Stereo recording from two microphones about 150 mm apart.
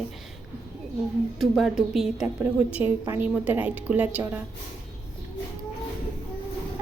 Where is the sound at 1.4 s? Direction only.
Centre (ahead or behind).